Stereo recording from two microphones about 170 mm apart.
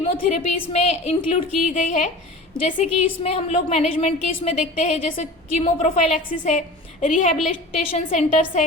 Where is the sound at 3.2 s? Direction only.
40° left (ahead or behind).